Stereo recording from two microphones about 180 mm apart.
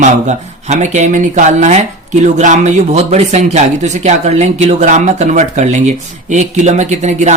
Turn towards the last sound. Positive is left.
turn(degrees=-40)  # may be behind; listen again after turning